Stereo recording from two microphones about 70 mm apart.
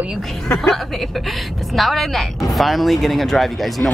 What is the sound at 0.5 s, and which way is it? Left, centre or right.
A woman's voice, centre.